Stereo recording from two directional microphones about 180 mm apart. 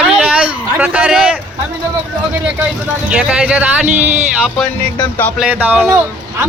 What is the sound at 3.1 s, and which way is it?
Speech, 5° right (ahead or behind).